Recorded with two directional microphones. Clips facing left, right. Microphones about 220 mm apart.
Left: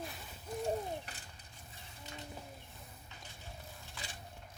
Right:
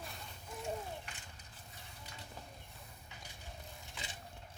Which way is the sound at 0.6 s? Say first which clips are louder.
Left 5 dB; 35° left (ahead or behind).